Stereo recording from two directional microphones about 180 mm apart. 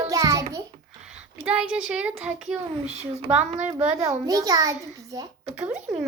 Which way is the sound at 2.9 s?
35° right (ahead or behind).